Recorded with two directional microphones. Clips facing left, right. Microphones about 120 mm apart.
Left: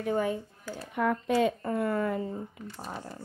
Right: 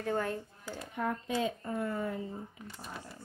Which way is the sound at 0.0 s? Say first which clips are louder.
Left 5 dB; 15° left (ahead or behind).